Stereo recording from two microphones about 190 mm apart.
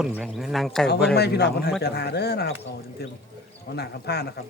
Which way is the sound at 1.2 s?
60° left (ahead or behind).